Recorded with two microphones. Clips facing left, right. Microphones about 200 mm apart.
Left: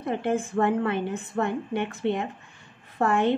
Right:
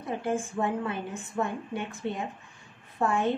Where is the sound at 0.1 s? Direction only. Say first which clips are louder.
Left 4 dB; 65° left (ahead or behind).